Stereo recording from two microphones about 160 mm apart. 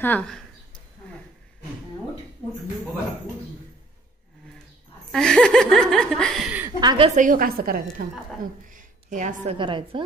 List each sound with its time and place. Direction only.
0.0 s speech: 10° left (ahead or behind)
5.1 s speech: 5° left (ahead or behind)
6.8 s a woman's voice: 25° right (ahead or behind)
7.2 s a woman's voice: 60° right (ahead or behind)
8.6 s a sound: 55° right (ahead or behind)
9.6 s a woman's voice: 30° right (ahead or behind)